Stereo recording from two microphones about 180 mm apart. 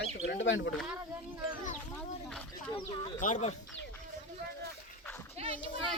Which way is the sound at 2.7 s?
25° left (ahead or behind).